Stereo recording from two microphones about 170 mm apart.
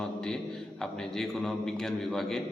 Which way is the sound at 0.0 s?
5° left (ahead or behind).